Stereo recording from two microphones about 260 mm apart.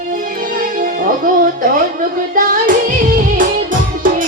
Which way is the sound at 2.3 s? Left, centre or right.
Right.